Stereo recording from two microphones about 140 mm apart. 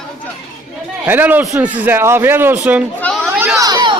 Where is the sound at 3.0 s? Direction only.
5° left (ahead or behind).